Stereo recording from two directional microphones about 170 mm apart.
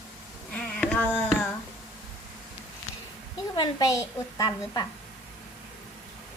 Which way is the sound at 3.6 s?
20° left (ahead or behind).